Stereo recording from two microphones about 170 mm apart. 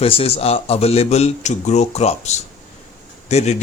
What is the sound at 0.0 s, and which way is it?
A man's voice, 35° left (ahead or behind).